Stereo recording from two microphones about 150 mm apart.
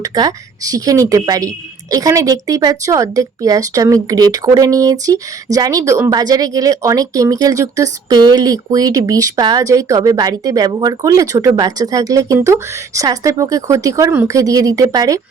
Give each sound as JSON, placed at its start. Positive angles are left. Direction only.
{"t": 0.0, "sound": "speech", "side_deg": -25}